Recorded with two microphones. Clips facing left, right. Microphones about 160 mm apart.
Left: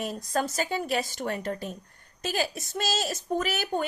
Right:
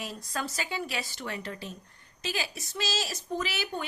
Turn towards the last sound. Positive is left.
turn(degrees=45)  # may be behind; listen again after turning